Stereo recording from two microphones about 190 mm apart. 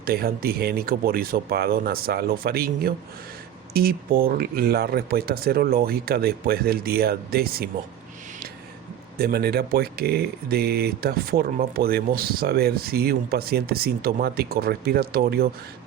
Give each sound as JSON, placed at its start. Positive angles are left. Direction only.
{"t": 0.0, "sound": "speech", "side_deg": -50}
{"t": 9.1, "sound": "speech", "side_deg": -55}